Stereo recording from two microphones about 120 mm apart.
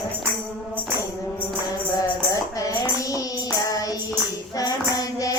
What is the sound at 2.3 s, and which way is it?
Tambourine, 30° left (ahead or behind).